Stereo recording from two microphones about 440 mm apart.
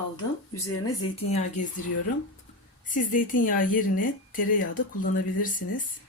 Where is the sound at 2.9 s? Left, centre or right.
Centre.